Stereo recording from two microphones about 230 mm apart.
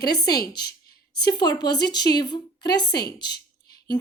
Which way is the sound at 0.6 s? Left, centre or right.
Left.